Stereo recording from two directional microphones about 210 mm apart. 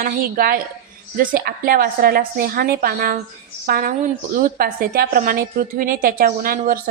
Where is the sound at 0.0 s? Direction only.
45° right (ahead or behind).